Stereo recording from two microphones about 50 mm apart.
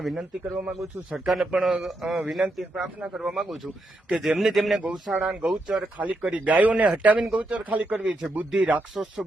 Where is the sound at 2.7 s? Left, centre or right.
Right.